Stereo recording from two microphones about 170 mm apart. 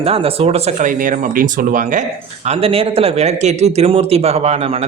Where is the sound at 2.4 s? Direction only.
35° right (ahead or behind).